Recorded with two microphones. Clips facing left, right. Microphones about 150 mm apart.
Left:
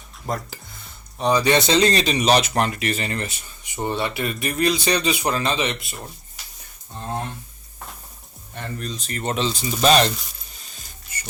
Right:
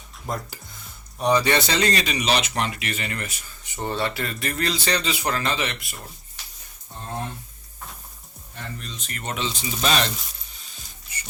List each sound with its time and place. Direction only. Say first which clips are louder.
1.3 s speech: left 3 dB; 15° left (ahead or behind)
2.2 s speech: left 7 dB; 40° left (ahead or behind)
3.6 s speech: left 2 dB; 15° left (ahead or behind)
8.8 s speech: left 7 dB; 40° left (ahead or behind)
11.1 s music: left 2 dB; 45° left (ahead or behind)